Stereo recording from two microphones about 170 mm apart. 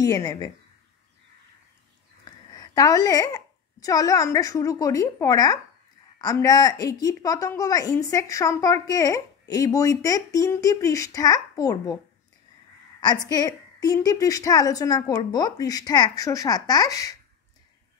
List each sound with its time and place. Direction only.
0.0 s a woman's voice: 20° left (ahead or behind)
2.5 s a woman's voice: 20° left (ahead or behind)
13.3 s a woman's voice: 25° left (ahead or behind)